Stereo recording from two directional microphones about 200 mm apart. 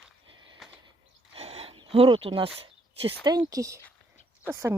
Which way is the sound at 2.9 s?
25° right (ahead or behind).